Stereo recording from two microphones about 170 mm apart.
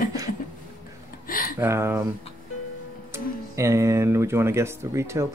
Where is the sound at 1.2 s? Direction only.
55° left (ahead or behind).